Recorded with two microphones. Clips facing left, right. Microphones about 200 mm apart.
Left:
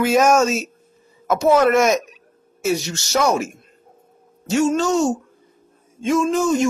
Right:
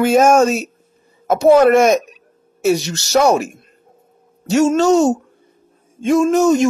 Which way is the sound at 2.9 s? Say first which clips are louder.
Right 5 dB; 35° right (ahead or behind).